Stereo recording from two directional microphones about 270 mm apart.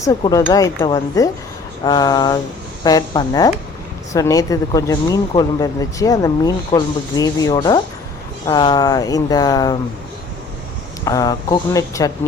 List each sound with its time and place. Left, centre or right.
0.0 s speech: centre
11.0 s speech: centre